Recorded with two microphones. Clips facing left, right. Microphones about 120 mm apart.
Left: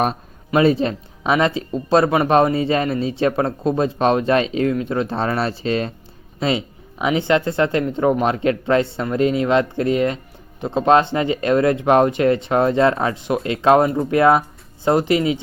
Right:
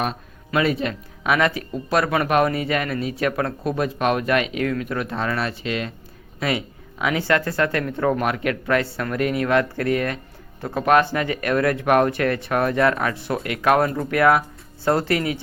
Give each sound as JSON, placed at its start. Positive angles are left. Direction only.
{"t": 0.5, "sound": "speech", "side_deg": 30}
{"t": 6.4, "sound": "speech", "side_deg": 25}